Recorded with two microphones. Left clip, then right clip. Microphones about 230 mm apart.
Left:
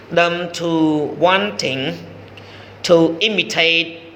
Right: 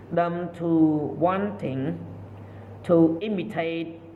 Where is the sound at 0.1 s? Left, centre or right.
Left.